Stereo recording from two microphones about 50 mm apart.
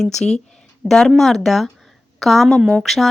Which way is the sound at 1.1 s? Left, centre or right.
Centre.